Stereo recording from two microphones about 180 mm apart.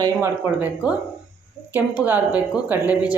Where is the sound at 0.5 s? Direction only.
10° right (ahead or behind).